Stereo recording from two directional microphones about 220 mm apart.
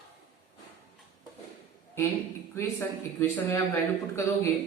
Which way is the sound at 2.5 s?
10° left (ahead or behind).